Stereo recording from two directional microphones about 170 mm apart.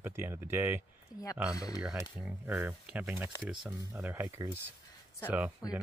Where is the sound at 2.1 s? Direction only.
10° right (ahead or behind).